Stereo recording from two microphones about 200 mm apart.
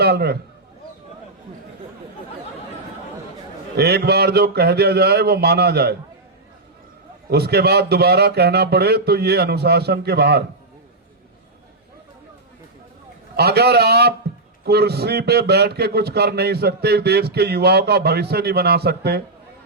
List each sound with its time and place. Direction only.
0.0 s a man's voice: 55° right (ahead or behind)
3.8 s a man's voice: 55° right (ahead or behind)
7.3 s a man's voice: 55° right (ahead or behind)
13.3 s a man's voice: 55° right (ahead or behind)